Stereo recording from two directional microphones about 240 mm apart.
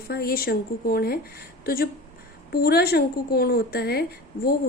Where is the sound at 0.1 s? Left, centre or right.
Left.